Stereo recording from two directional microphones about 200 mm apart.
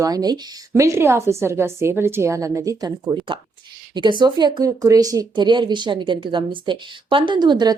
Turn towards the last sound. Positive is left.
turn(degrees=-20)  # may be behind; listen again after turning